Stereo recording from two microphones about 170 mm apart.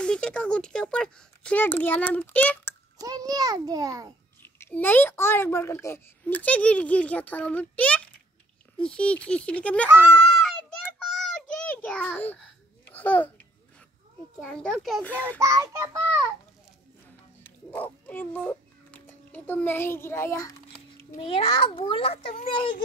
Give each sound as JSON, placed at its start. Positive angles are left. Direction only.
{"t": 0.0, "sound": "a woman's voice", "side_deg": 5}
{"t": 3.0, "sound": "a child's voice", "side_deg": -20}
{"t": 4.4, "sound": "a woman's voice", "side_deg": 10}
{"t": 10.5, "sound": "a sound", "side_deg": 5}
{"t": 12.8, "sound": "babbling", "side_deg": 10}
{"t": 14.4, "sound": "a child's voice", "side_deg": 5}
{"t": 15.2, "sound": "a child's voice", "side_deg": -20}
{"t": 17.6, "sound": "speech", "side_deg": 10}
{"t": 21.2, "sound": "a child's voice", "side_deg": 35}